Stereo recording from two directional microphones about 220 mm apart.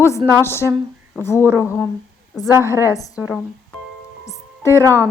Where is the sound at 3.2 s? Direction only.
5° right (ahead or behind).